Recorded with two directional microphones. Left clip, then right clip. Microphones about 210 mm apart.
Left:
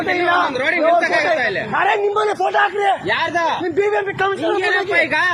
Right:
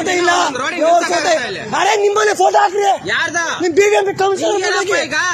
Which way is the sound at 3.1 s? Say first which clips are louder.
Right 1 dB; 30° right (ahead or behind).